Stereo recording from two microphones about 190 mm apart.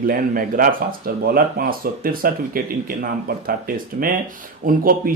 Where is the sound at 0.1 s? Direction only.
45° right (ahead or behind).